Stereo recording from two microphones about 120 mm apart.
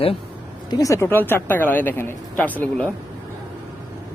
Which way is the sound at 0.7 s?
30° left (ahead or behind).